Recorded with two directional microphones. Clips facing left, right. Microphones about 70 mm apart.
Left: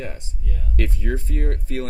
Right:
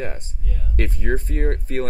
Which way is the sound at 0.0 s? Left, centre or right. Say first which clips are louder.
Right 3 dB; right.